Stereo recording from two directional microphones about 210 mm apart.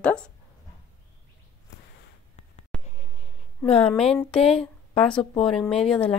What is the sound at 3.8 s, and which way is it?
A woman's voice, 5° left (ahead or behind).